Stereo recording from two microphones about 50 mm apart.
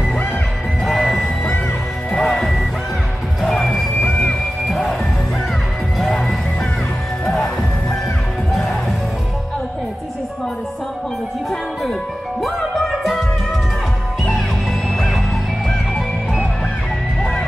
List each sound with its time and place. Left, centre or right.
0.8 s music: centre
2.1 s music: centre
3.4 s music: centre
4.0 s music: left
4.6 s music: centre
12.4 s music: centre